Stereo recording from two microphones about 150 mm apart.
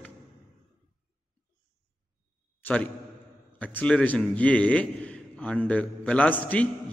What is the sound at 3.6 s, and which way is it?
A man's voice, 10° left (ahead or behind).